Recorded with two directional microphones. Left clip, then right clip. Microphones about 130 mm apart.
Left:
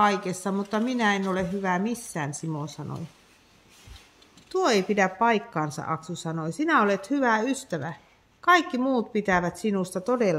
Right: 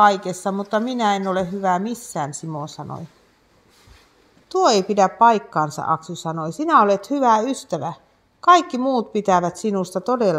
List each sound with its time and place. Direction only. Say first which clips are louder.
0.0 s a woman's voice: right 8 dB; 35° right (ahead or behind)
2.8 s speech: right 6 dB; 10° right (ahead or behind)
4.5 s a woman's voice: right 7 dB; 40° right (ahead or behind)